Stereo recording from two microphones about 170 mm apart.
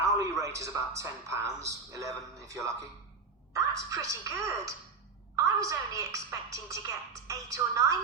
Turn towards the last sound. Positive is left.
turn(degrees=-20)  # may be behind; listen again after turning